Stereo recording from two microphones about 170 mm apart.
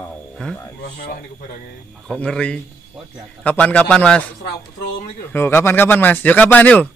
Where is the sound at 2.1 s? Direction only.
5° left (ahead or behind).